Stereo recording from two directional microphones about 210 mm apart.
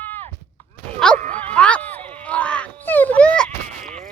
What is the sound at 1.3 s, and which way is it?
Bow-wow, 5° left (ahead or behind).